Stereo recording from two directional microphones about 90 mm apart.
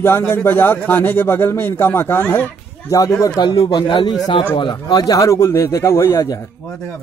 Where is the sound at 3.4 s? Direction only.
60° left (ahead or behind).